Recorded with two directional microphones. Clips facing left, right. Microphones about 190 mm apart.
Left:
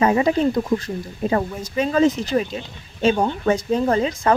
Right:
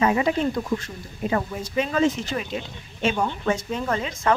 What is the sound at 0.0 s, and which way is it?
Speech, 35° left (ahead or behind).